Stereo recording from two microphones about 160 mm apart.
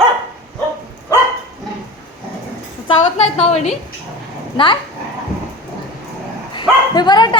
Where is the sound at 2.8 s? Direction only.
35° left (ahead or behind).